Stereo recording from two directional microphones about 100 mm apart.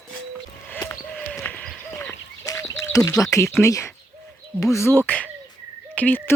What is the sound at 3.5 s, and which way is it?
Speech, 30° left (ahead or behind).